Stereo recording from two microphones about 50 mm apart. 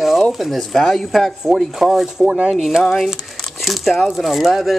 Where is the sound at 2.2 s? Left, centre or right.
Right.